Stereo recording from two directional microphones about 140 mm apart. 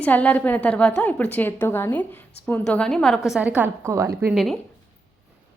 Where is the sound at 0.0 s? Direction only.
10° left (ahead or behind).